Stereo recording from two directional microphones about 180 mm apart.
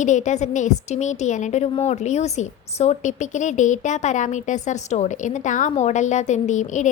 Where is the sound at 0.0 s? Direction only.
40° left (ahead or behind).